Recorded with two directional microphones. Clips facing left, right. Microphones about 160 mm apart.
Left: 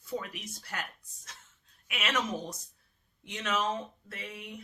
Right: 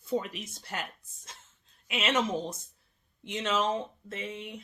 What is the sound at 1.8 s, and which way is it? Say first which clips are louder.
Speech: right 4 dB; 25° right (ahead or behind).